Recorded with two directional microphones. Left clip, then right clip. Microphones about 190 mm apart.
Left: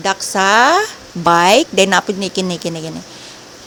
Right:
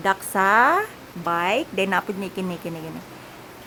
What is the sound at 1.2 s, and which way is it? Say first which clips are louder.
Speech: left 12 dB; 45° left (ahead or behind).